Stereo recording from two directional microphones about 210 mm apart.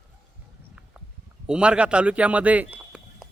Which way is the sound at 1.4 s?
5° right (ahead or behind).